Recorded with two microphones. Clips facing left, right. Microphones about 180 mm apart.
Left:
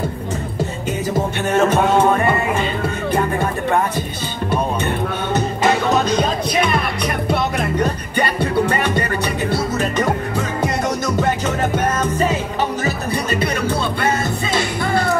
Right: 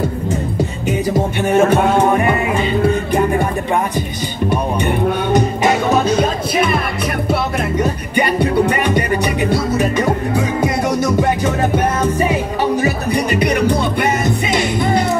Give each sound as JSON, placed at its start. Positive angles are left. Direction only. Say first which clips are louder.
{"t": 1.5, "sound": "music", "louder": "right 2 dB", "side_deg": -10}
{"t": 4.5, "sound": "music", "louder": "right 2 dB", "side_deg": -15}